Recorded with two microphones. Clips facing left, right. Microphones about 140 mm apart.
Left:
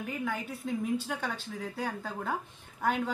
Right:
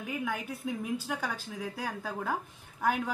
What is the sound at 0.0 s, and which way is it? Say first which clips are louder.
Speech: even; 5° right (ahead or behind).